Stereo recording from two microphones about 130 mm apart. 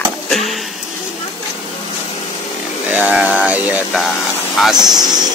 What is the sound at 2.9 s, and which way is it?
Speech, 15° right (ahead or behind).